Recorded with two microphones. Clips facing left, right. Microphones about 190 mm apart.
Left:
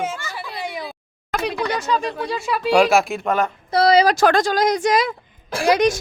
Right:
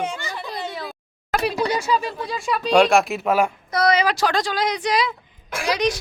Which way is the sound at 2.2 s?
Centre (ahead or behind).